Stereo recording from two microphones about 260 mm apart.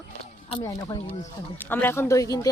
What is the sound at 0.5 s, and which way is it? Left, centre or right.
Speech, centre.